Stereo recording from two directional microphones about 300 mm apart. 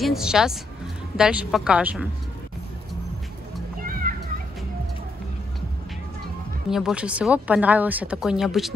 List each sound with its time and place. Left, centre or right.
0.0 s a woman's voice: centre
4.1 s children playing: right
6.7 s speech: centre